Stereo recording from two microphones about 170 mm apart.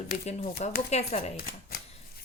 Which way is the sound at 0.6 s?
40° left (ahead or behind).